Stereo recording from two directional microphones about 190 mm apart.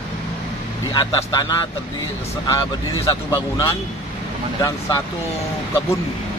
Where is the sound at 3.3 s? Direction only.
20° left (ahead or behind).